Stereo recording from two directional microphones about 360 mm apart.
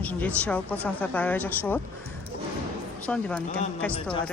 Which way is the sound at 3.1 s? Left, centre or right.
Centre.